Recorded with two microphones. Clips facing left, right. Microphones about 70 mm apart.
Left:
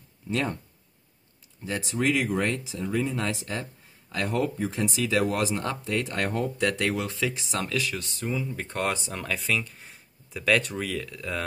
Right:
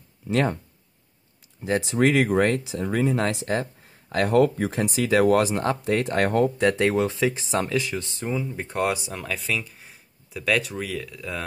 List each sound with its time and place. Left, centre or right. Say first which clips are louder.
2.0 s speech: right 5 dB; right
6.6 s speech: right 6 dB; right
8.7 s speech: right 4 dB; centre